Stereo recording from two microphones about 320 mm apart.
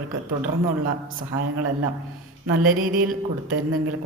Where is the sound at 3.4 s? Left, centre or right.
Right.